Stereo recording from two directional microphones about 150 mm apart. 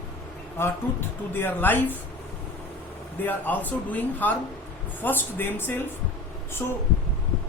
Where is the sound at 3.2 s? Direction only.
10° left (ahead or behind).